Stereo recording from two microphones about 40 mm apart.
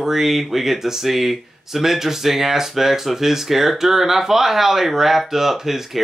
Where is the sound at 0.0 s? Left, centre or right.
Centre.